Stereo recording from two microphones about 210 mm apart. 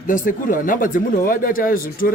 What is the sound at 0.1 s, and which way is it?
Speech, 40° left (ahead or behind).